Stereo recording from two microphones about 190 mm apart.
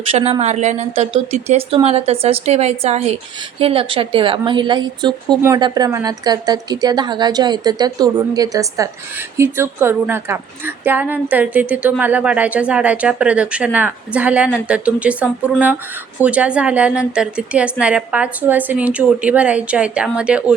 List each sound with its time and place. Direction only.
0.1 s a woman's voice: 30° right (ahead or behind); by 20.4 s 5° right (ahead or behind)